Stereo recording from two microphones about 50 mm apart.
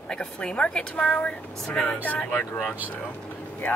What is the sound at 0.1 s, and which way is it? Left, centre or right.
Speech, centre.